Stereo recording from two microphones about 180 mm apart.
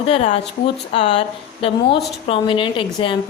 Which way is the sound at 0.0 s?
35° left (ahead or behind).